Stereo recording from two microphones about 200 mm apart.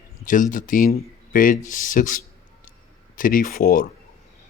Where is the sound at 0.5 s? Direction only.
40° left (ahead or behind).